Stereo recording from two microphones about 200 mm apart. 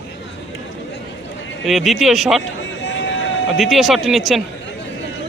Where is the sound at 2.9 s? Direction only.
65° left (ahead or behind).